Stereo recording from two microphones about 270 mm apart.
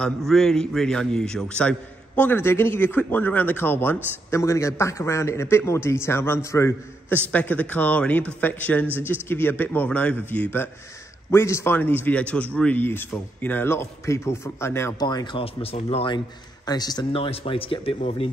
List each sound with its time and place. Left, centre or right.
0.0 s a man's voice: centre; by 18.3 s left